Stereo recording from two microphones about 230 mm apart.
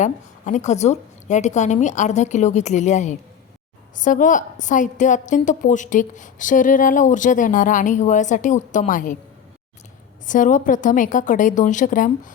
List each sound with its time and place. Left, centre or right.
0.0 s a woman's voice: left
10.2 s a woman's voice: left